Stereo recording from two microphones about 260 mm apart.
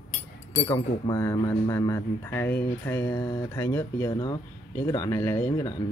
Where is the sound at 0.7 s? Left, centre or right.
Centre.